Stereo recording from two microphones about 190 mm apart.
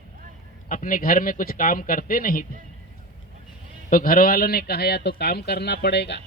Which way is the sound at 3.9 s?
45° left (ahead or behind).